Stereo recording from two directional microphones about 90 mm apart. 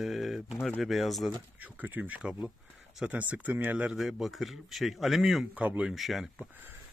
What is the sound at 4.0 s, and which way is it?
Speech, centre (ahead or behind).